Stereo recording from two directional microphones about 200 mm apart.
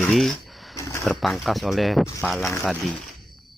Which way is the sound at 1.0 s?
Centre (ahead or behind).